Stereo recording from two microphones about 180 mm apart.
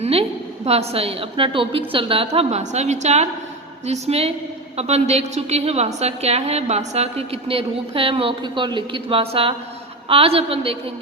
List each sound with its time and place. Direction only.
0.0 s a woman's voice: 35° right (ahead or behind)